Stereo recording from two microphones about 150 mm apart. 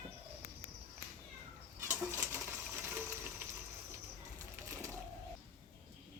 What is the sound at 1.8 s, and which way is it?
Bird, 15° right (ahead or behind).